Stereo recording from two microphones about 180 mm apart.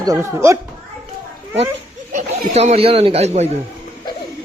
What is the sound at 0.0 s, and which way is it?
Speech, 15° right (ahead or behind).